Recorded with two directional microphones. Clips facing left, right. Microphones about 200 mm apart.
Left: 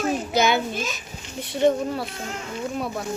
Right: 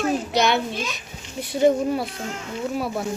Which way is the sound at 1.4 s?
10° right (ahead or behind).